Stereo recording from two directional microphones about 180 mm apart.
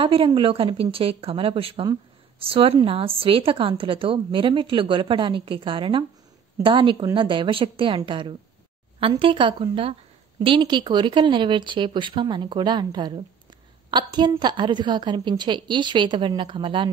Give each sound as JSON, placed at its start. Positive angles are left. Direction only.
{"t": 0.0, "sound": "a woman's voice", "side_deg": -30}